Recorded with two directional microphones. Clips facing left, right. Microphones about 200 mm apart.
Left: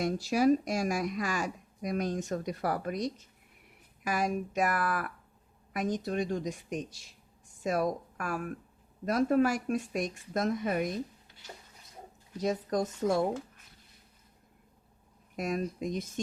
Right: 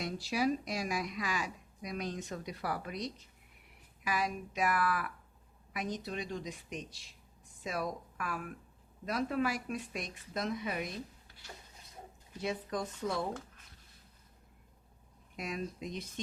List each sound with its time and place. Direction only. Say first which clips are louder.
0.0 s a woman's voice: left 7 dB; 45° left (ahead or behind)
12.4 s speech: left 6 dB; 40° left (ahead or behind)
15.4 s speech: left 7 dB; 45° left (ahead or behind)